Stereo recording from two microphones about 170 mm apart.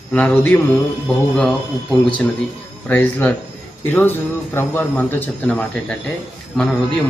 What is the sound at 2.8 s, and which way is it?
A man's voice, 10° left (ahead or behind).